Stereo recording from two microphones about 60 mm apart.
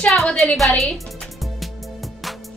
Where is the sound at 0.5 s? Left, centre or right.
Centre.